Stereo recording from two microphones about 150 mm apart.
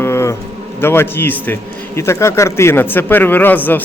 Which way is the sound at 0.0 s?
15° left (ahead or behind).